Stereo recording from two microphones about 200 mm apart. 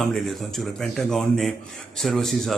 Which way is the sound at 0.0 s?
Centre (ahead or behind).